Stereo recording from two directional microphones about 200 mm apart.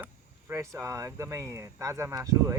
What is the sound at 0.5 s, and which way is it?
Speech, 15° right (ahead or behind).